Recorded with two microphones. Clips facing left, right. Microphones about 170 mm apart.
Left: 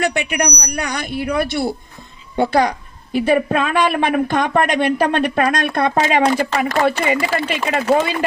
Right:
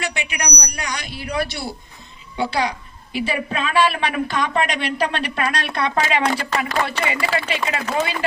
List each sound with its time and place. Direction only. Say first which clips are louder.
0.0 s a man's voice: left 8 dB; 55° left (ahead or behind)